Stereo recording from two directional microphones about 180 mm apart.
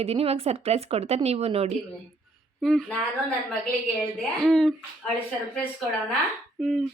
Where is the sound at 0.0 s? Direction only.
35° right (ahead or behind).